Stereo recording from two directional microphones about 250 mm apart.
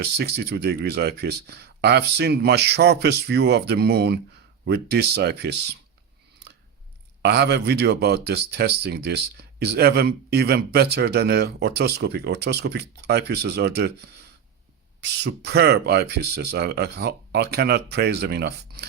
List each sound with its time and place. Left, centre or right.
0.0 s speech: right
7.2 s speech: right
15.2 s speech: right